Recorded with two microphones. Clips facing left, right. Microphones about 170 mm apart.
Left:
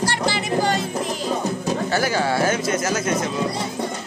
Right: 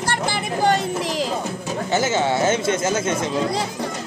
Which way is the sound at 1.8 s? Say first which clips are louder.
Right 3 dB; 20° right (ahead or behind).